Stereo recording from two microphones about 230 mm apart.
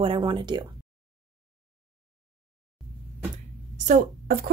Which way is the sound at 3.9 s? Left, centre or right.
Right.